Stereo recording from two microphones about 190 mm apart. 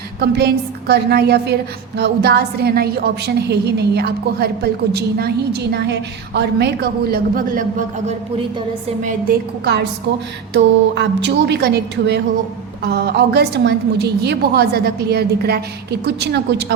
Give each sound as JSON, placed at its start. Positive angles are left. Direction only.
{"t": 0.2, "sound": "a woman's voice", "side_deg": -60}
{"t": 10.5, "sound": "a woman's voice", "side_deg": -65}